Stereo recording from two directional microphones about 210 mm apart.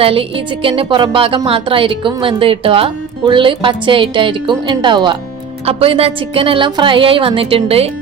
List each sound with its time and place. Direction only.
0.0 s speech: 25° right (ahead or behind)